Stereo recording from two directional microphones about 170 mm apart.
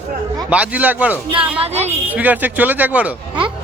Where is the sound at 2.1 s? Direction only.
10° right (ahead or behind).